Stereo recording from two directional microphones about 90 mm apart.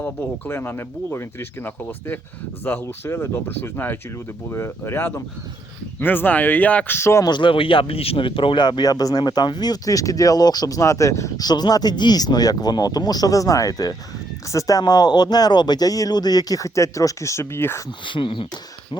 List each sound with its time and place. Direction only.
0.0 s speech: 25° left (ahead or behind)
7.3 s speech: 60° left (ahead or behind); by 11.4 s 35° left (ahead or behind)
11.4 s speech: 50° left (ahead or behind); by 17.8 s 25° left (ahead or behind)
18.0 s speech: 65° left (ahead or behind)